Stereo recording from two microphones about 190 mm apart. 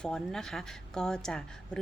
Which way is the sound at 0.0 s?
5° left (ahead or behind).